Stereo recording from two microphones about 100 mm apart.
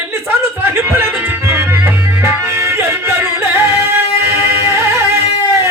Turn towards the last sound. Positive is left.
turn(degrees=-25)  # may be behind; listen again after turning